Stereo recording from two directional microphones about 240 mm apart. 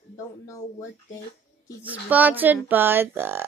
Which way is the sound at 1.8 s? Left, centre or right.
Centre.